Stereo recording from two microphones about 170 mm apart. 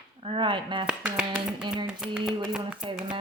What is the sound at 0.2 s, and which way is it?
Speech, 30° right (ahead or behind).